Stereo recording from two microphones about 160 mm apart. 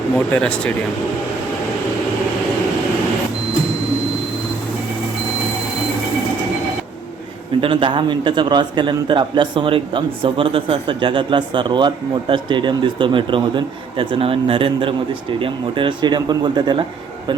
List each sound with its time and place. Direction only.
0.3 s speech: 5° left (ahead or behind)
7.6 s a man's voice: 30° right (ahead or behind)